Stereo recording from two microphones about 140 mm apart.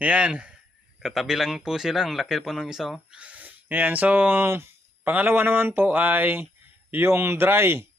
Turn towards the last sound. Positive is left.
turn(degrees=-15)  # may be behind; listen again after turning